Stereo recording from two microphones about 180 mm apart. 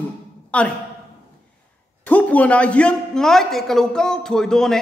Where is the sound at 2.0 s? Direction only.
10° left (ahead or behind).